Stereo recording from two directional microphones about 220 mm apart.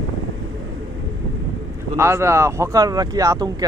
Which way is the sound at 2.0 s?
10° right (ahead or behind).